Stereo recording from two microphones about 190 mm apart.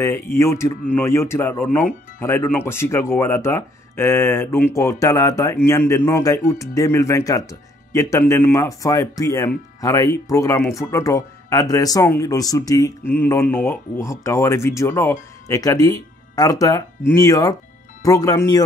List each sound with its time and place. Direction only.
0.0 s speech: 15° left (ahead or behind)